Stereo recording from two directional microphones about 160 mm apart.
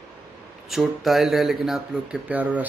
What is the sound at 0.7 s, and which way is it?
Speech, centre (ahead or behind).